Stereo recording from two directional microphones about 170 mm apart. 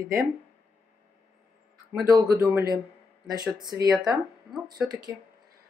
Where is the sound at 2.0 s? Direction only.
20° right (ahead or behind).